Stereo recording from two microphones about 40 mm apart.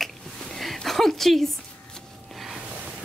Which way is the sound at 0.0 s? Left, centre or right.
Centre.